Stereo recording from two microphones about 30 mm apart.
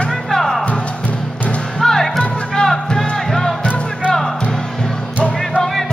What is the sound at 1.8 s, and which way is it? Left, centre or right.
Music, centre.